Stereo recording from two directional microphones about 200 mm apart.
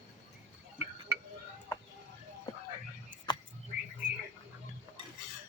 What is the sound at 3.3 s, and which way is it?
Frog, 20° left (ahead or behind).